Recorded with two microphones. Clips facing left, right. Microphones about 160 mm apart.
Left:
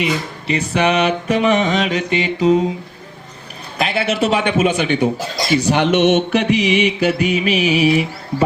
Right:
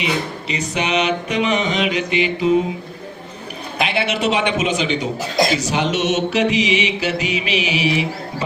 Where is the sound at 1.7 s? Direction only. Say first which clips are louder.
Left 2 dB; 45° left (ahead or behind).